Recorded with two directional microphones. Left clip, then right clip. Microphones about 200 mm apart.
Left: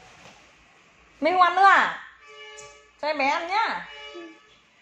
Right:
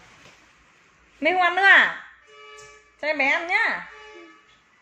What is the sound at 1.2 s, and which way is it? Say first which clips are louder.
Speech: even; 5° left (ahead or behind).